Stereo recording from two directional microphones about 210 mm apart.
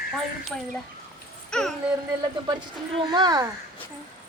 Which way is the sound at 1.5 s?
Centre (ahead or behind).